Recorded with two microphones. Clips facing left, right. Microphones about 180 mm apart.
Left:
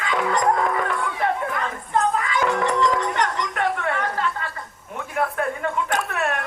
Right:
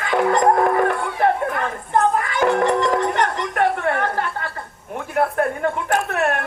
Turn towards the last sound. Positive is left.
turn(degrees=-50)  # may be behind; listen again after turning